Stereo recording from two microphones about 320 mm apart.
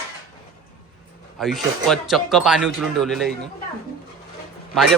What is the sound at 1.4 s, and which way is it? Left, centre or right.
Speech, centre.